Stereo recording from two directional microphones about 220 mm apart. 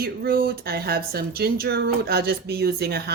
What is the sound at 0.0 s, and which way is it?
A woman's voice, 45° right (ahead or behind).